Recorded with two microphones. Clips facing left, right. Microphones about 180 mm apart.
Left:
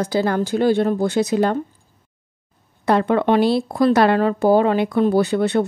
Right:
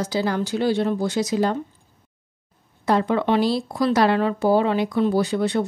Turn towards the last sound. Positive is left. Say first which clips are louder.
# left 4 dB
turn(degrees=60)  # may be behind; listen again after turning